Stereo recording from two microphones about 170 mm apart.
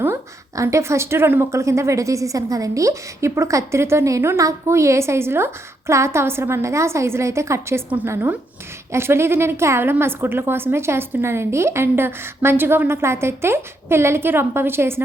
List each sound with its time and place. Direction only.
0.0 s a woman's voice: 15° right (ahead or behind)